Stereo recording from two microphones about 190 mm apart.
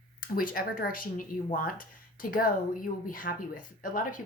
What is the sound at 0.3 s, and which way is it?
Speech, 50° left (ahead or behind).